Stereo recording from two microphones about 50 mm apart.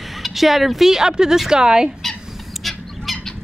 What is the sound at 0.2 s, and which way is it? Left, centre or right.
Speech, centre.